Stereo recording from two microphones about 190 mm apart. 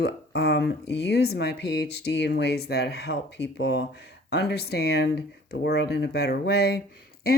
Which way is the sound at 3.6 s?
70° left (ahead or behind).